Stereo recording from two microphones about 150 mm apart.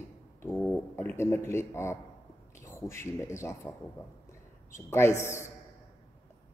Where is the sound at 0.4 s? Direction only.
10° left (ahead or behind).